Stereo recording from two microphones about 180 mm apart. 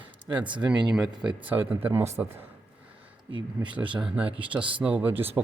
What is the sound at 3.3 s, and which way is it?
Speech, 25° right (ahead or behind).